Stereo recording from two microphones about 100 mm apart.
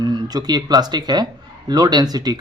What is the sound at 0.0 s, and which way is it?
Speech, 45° right (ahead or behind).